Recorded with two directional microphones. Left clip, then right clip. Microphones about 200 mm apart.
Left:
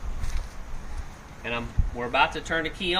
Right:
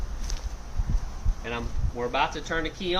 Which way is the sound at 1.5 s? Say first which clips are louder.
Left 2 dB; 40° left (ahead or behind).